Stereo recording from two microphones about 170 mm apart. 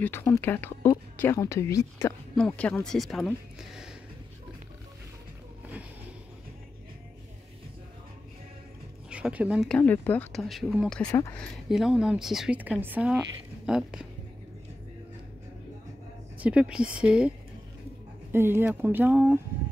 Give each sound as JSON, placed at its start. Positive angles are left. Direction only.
{"t": 0.0, "sound": "speech", "side_deg": 15}
{"t": 2.3, "sound": "speech", "side_deg": 5}
{"t": 9.1, "sound": "speech", "side_deg": -5}
{"t": 9.8, "sound": "a woman's voice", "side_deg": 10}
{"t": 11.1, "sound": "speech", "side_deg": 20}
{"t": 11.3, "sound": "a woman's voice", "side_deg": 0}
{"t": 16.3, "sound": "speech", "side_deg": -5}
{"t": 18.3, "sound": "speech", "side_deg": -15}